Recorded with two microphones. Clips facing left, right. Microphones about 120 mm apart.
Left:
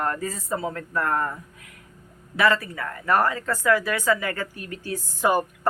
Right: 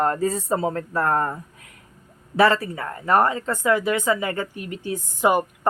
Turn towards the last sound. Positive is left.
turn(degrees=-20)  # may be behind; listen again after turning